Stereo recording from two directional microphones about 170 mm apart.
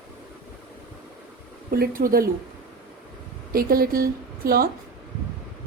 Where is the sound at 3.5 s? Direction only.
60° right (ahead or behind).